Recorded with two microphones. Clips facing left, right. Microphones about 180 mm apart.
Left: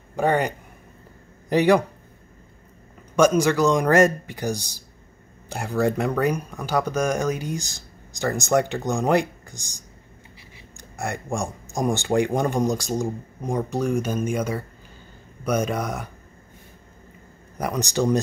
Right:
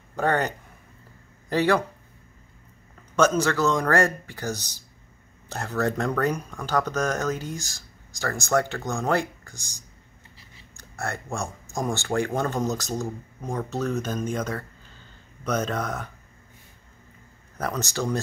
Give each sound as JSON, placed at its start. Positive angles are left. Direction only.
{"t": 0.1, "sound": "speech", "side_deg": 10}
{"t": 3.2, "sound": "speech", "side_deg": 15}
{"t": 17.6, "sound": "speech", "side_deg": 15}